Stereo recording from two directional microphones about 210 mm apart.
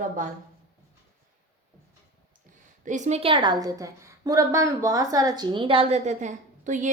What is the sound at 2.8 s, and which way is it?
A woman's voice, 35° right (ahead or behind).